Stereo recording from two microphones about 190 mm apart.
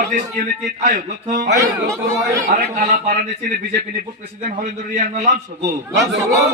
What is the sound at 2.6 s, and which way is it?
Speech, 55° right (ahead or behind).